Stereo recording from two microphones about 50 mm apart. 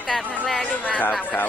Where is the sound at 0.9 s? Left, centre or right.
Left.